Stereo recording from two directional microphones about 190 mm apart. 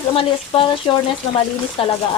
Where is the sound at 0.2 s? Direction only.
25° left (ahead or behind).